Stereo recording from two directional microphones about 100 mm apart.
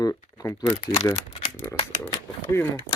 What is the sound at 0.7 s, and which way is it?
Speech, 80° left.